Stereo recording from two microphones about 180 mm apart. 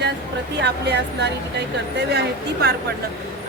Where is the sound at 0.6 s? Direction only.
70° right (ahead or behind).